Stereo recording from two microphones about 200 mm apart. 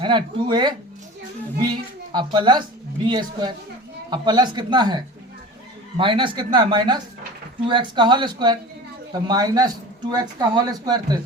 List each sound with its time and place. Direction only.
0.0 s speech: 25° right (ahead or behind)
2.1 s speech: 25° right (ahead or behind)
6.0 s speech: 25° right (ahead or behind)